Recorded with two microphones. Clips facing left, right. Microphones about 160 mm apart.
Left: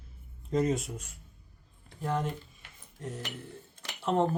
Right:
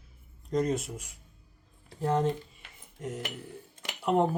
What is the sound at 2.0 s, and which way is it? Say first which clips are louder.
Speech: right 5 dB; 35° right (ahead or behind).